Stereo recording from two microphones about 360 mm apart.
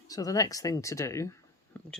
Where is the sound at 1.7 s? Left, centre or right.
Centre.